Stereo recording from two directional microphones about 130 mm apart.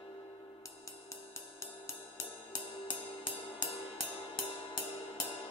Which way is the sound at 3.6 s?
45° left (ahead or behind).